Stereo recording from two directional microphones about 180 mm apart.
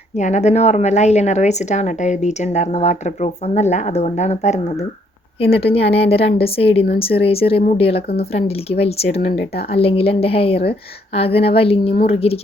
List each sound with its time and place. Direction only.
0.2 s a woman's voice: 40° left (ahead or behind)